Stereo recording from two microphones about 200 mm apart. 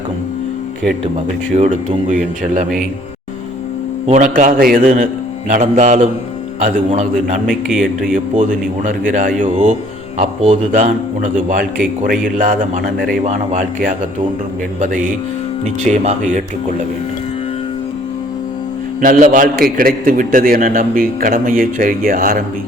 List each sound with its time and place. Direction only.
1.5 s a man's voice: 35° right (ahead or behind)
4.0 s a man's voice: 35° right (ahead or behind)
7.4 s speech: centre (ahead or behind)
8.1 s a man's voice: 40° right (ahead or behind)
19.0 s a man's voice: 40° right (ahead or behind)